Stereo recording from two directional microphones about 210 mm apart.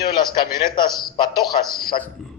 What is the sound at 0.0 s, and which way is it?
A man's voice, 20° left (ahead or behind).